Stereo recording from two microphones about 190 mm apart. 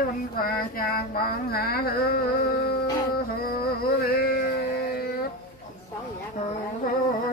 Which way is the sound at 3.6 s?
55° left (ahead or behind).